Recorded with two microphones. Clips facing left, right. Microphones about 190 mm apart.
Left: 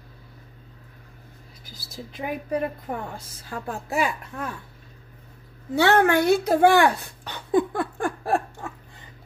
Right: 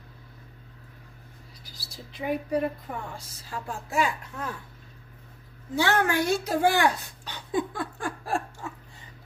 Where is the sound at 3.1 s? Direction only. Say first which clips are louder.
Left 3 dB; 55° left (ahead or behind).